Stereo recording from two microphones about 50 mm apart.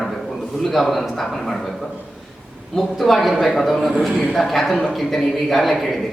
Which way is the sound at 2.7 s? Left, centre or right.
Centre.